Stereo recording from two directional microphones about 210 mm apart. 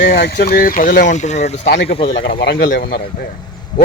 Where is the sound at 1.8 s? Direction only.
25° left (ahead or behind).